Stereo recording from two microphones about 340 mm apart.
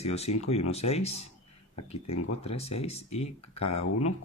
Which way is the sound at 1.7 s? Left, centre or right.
Left.